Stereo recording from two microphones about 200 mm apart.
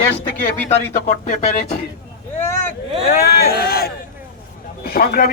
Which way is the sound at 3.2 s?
50° left (ahead or behind).